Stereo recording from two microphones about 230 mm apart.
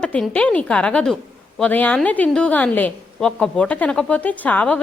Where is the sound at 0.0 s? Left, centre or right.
Centre.